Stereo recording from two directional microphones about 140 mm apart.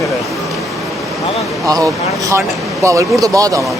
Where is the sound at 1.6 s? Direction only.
25° right (ahead or behind).